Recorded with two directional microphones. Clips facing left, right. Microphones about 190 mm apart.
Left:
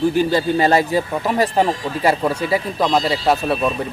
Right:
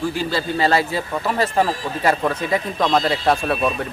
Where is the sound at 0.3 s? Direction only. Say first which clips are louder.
Left 4 dB; 15° left (ahead or behind).